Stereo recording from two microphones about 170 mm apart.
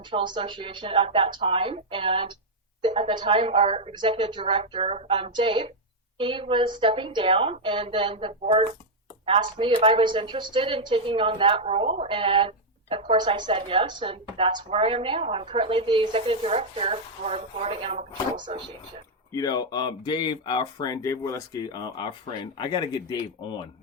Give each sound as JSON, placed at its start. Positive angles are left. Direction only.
{"t": 0.1, "sound": "a woman's voice", "side_deg": -30}
{"t": 19.3, "sound": "speech", "side_deg": 20}